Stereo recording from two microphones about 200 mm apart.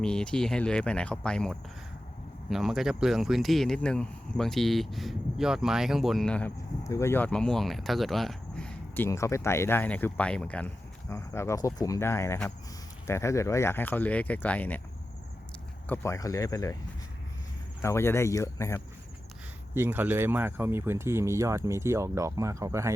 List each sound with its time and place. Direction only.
0.0 s speech: 5° left (ahead or behind)
15.9 s speech: 15° left (ahead or behind)
17.8 s speech: 15° left (ahead or behind)
19.7 s speech: 10° right (ahead or behind)